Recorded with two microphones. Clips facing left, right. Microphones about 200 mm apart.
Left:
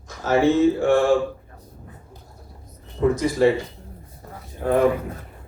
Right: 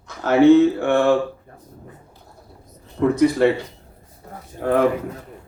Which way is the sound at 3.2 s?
60° right (ahead or behind).